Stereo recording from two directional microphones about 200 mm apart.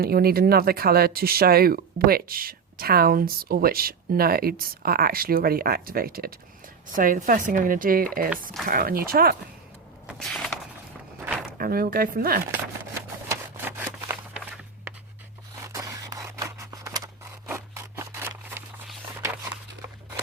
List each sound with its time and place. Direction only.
0.0 s speech: 50° right (ahead or behind)
10.1 s walk: centre (ahead or behind)
11.5 s speech: 50° right (ahead or behind)
12.9 s a sound: 10° right (ahead or behind)
15.6 s scissors: 15° right (ahead or behind)
17.5 s a sound: 15° right (ahead or behind)